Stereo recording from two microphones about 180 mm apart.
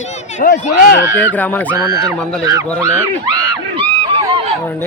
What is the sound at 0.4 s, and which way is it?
Speech, 75° left (ahead or behind).